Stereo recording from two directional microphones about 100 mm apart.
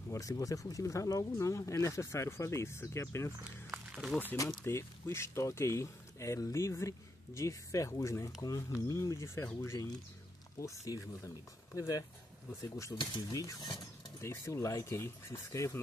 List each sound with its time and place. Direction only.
0.1 s speech: 35° left (ahead or behind)
3.9 s a sound: 5° right (ahead or behind)
4.6 s speech: 25° left (ahead or behind)